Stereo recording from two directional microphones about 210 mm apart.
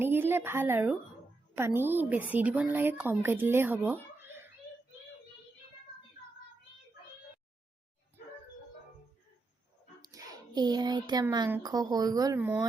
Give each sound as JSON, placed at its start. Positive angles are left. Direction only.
{"t": 0.0, "sound": "a woman's voice", "side_deg": -10}
{"t": 4.2, "sound": "a sound", "side_deg": -10}
{"t": 10.0, "sound": "speech", "side_deg": -15}